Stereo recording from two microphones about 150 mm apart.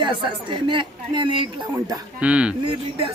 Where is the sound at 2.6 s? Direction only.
35° right (ahead or behind).